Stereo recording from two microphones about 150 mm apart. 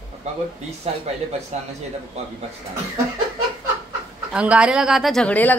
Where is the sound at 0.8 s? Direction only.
45° right (ahead or behind).